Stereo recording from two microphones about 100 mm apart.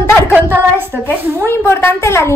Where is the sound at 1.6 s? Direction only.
25° left (ahead or behind).